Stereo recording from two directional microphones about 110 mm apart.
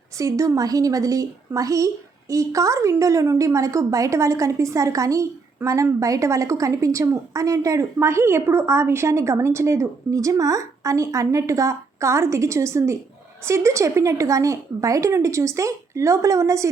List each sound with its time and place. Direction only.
0.2 s a woman's voice: 30° right (ahead or behind)